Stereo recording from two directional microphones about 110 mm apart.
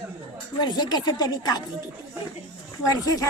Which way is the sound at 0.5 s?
40° left (ahead or behind).